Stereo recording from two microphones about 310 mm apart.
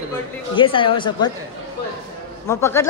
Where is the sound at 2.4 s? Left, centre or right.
Centre.